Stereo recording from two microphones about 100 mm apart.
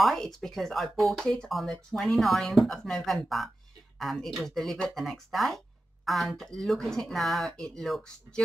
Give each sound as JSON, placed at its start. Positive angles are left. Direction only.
{"t": 0.0, "sound": "speech", "side_deg": 5}